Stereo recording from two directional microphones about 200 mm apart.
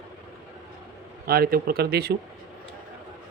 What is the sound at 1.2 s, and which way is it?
Speech, 50° right (ahead or behind).